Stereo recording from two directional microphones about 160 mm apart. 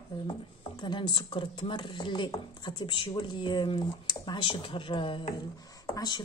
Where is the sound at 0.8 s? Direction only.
30° left (ahead or behind).